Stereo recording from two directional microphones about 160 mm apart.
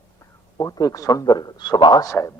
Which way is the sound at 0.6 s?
20° left (ahead or behind).